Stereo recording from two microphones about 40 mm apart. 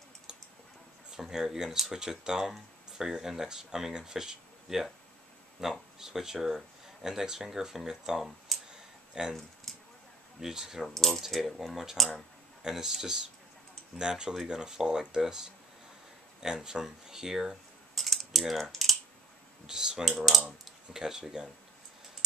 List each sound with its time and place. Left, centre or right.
1.1 s speech: centre
8.5 s clicking: centre
9.1 s speech: centre
9.7 s a sound: centre
10.4 s speech: centre
11.0 s speech: centre
17.9 s typing: centre
18.6 s computer keyboard: centre
19.6 s speech: centre
20.1 s speech: centre
20.9 s speech: centre